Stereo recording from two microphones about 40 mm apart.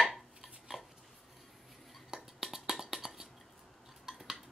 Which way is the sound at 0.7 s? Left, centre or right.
Centre.